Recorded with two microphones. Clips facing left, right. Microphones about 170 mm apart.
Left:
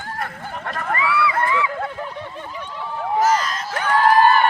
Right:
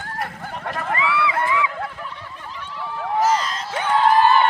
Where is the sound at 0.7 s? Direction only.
15° right (ahead or behind).